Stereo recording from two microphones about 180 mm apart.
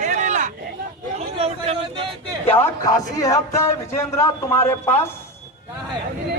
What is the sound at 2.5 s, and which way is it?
Speech, 15° left (ahead or behind).